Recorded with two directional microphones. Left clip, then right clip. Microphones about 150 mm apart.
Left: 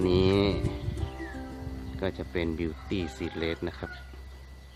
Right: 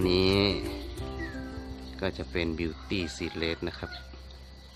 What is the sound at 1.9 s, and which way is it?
Speech, 10° left (ahead or behind).